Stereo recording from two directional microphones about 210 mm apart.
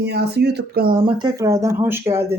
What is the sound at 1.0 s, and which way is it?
Speech, 20° right (ahead or behind).